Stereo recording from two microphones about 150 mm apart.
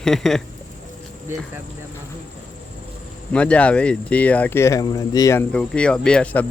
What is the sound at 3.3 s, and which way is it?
Speech, 10° left (ahead or behind).